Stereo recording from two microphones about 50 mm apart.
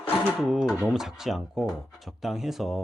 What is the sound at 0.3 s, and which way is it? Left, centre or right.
Speech, centre.